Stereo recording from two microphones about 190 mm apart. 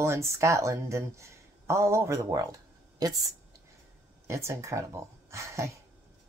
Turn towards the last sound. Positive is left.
turn(degrees=-15)  # may be behind; listen again after turning